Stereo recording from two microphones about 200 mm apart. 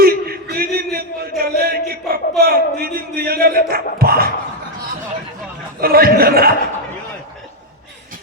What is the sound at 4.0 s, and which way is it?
Dog, 50° right (ahead or behind).